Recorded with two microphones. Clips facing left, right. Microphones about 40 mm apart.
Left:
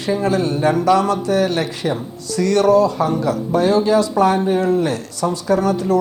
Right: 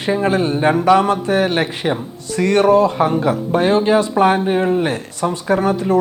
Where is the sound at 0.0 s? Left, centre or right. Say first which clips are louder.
Right 1 dB; right.